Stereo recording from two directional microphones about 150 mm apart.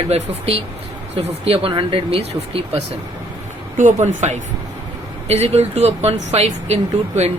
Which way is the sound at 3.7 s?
55° right (ahead or behind).